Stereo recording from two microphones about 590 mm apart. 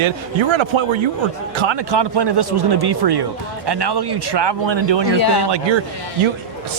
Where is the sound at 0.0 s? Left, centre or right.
Right.